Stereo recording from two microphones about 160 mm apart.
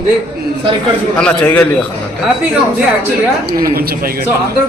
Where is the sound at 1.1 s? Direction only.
10° left (ahead or behind).